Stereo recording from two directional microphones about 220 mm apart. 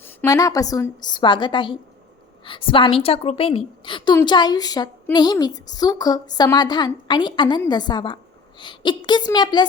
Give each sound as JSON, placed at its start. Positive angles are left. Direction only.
{"t": 0.0, "sound": "a woman's voice", "side_deg": 10}